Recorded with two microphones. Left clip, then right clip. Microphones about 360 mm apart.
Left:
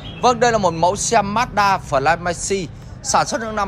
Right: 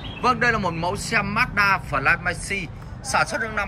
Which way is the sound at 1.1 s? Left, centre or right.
Centre.